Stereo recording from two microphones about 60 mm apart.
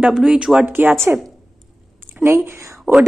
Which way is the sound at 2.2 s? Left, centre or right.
Right.